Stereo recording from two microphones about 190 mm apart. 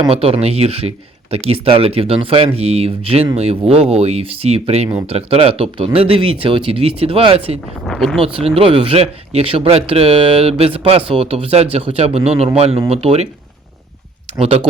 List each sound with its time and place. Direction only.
0.1 s speech: 30° right (ahead or behind)
7.9 s speech: centre (ahead or behind)
8.2 s speech: 30° right (ahead or behind)
14.3 s speech: 30° right (ahead or behind)